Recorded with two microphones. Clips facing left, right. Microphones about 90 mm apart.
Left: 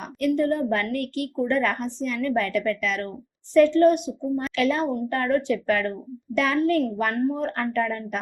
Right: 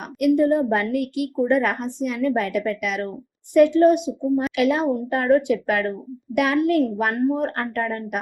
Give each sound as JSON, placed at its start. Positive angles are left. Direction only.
{"t": 0.2, "sound": "a woman's voice", "side_deg": -15}
{"t": 4.5, "sound": "speech", "side_deg": -15}